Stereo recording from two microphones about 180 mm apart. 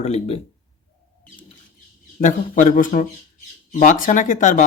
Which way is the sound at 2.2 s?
45° left (ahead or behind).